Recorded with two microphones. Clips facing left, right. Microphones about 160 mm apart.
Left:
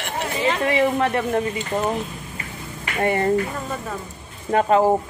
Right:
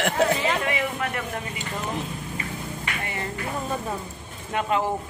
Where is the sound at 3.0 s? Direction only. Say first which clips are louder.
Left 16 dB; 55° left (ahead or behind).